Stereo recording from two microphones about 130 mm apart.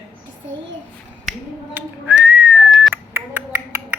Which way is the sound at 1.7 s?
10° right (ahead or behind).